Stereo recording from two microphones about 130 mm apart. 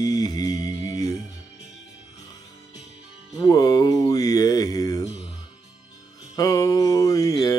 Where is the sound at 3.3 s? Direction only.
30° left (ahead or behind).